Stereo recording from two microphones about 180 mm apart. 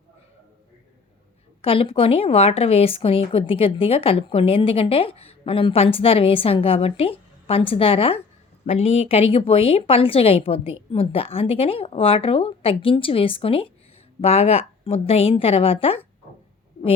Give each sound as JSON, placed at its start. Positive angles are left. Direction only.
{"t": 1.6, "sound": "a woman's voice", "side_deg": 30}